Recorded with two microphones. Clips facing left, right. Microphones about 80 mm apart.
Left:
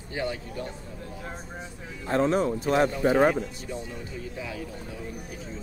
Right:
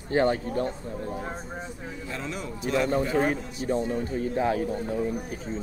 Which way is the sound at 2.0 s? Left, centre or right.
Left.